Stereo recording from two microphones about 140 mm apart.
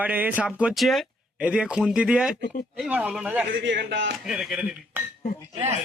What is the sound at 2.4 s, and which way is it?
Speech, 75° left (ahead or behind).